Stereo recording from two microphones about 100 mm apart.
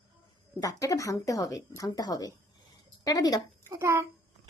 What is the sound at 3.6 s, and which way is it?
Speech, 25° right (ahead or behind).